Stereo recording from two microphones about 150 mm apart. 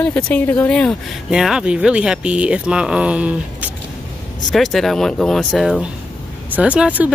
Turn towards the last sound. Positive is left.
turn(degrees=-10)  # may be behind; listen again after turning